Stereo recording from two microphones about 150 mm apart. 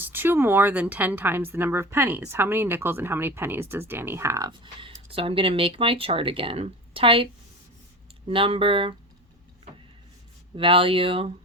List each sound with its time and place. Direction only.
0.0 s speech: 15° right (ahead or behind); by 7.3 s 35° right (ahead or behind)
8.3 s speech: 35° right (ahead or behind)
10.6 s speech: 35° right (ahead or behind)